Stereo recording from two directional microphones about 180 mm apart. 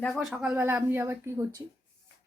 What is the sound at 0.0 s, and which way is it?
Speech, centre (ahead or behind).